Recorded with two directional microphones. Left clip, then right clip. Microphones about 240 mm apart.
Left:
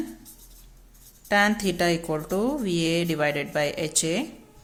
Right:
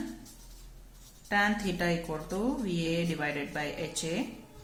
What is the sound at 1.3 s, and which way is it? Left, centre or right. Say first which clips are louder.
Speech: left 7 dB; left.